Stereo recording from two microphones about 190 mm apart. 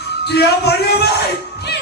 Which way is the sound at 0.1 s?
60° left (ahead or behind).